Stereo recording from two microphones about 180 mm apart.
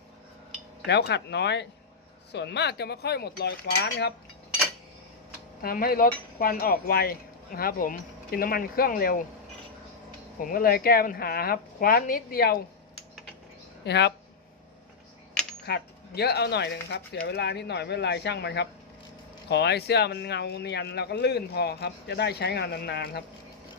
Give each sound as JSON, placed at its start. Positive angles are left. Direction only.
{"t": 0.9, "sound": "speech", "side_deg": 70}
{"t": 5.6, "sound": "speech", "side_deg": 55}
{"t": 10.4, "sound": "speech", "side_deg": 55}
{"t": 13.8, "sound": "speech", "side_deg": 70}
{"t": 15.6, "sound": "speech", "side_deg": 65}